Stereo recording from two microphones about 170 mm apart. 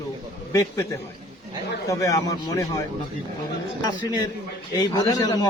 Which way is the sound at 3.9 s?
20° left (ahead or behind).